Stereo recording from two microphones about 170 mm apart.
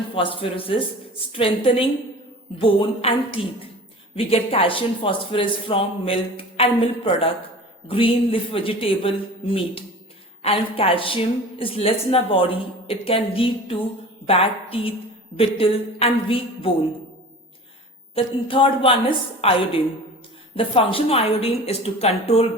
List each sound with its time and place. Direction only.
0.1 s a woman's voice: 30° left (ahead or behind)
18.1 s a woman's voice: 30° left (ahead or behind)